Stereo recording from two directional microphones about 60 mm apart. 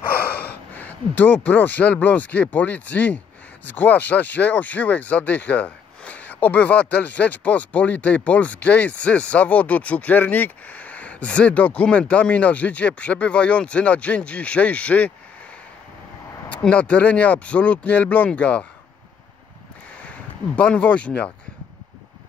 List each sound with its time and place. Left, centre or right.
0.2 s speech: left
16.4 s speech: left
20.0 s speech: left